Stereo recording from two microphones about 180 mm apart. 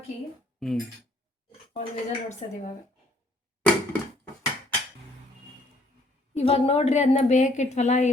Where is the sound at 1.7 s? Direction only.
40° left (ahead or behind).